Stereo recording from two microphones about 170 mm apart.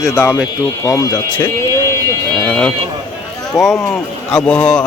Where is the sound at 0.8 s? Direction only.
20° left (ahead or behind).